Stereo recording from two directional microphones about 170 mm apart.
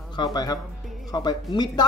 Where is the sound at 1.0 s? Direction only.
20° left (ahead or behind).